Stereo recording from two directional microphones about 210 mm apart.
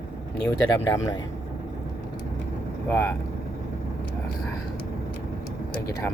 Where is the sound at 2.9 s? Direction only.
10° left (ahead or behind).